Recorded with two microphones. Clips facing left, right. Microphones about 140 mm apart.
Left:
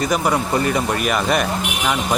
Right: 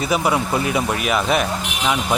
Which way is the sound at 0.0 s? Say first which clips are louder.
Even; 5° right (ahead or behind).